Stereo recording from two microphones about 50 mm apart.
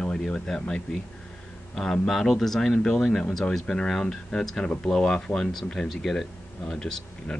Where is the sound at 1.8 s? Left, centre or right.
Centre.